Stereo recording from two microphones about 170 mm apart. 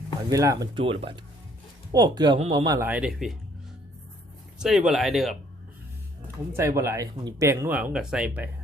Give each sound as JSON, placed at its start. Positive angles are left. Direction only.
{"t": 0.3, "sound": "speech", "side_deg": -20}
{"t": 2.4, "sound": "speech", "side_deg": -35}
{"t": 2.6, "sound": "speech", "side_deg": -15}
{"t": 4.5, "sound": "speech", "side_deg": -5}
{"t": 6.5, "sound": "speech", "side_deg": -15}